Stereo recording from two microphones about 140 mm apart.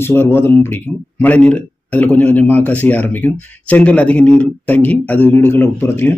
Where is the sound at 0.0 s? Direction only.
15° left (ahead or behind).